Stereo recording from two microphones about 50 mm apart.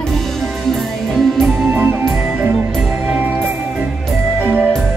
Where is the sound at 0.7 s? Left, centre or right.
Centre.